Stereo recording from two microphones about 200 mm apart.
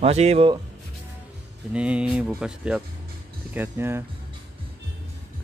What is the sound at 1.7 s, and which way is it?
Speech, 5° right (ahead or behind).